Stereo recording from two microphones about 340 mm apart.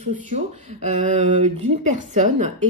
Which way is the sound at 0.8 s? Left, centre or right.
Right.